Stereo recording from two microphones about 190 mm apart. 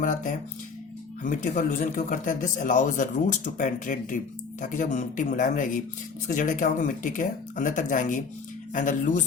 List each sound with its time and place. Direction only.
0.0 s speech: 45° left (ahead or behind)